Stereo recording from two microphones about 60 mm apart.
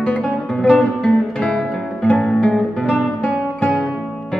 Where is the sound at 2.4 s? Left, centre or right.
Centre.